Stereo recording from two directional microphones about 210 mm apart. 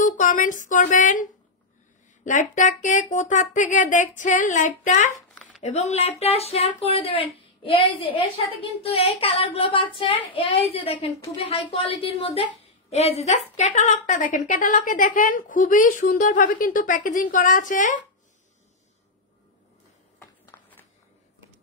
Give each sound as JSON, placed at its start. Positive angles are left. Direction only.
{"t": 0.0, "sound": "a woman's voice", "side_deg": 35}
{"t": 20.5, "sound": "walk", "side_deg": 15}